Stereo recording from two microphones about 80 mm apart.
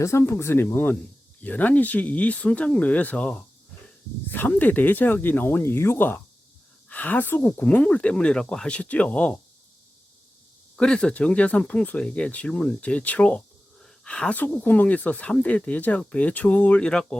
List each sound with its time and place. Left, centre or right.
0.0 s speech: left; by 9.4 s centre
10.8 s speech: centre